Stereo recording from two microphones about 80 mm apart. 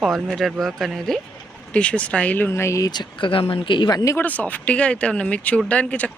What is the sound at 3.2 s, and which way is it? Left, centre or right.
Speech, left.